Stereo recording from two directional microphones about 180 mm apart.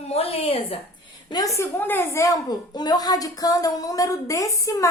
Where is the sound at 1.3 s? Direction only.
20° left (ahead or behind).